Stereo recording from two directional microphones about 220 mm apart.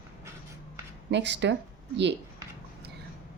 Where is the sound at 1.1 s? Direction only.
55° right (ahead or behind).